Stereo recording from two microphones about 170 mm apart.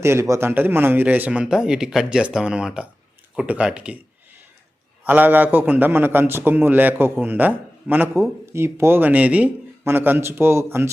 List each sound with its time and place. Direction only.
0.0 s a man's voice: 15° right (ahead or behind)
5.0 s a man's voice: 10° right (ahead or behind)